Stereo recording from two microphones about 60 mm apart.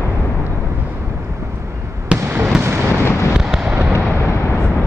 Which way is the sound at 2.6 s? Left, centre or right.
Right.